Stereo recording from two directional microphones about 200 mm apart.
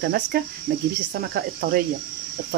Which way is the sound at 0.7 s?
65° right (ahead or behind).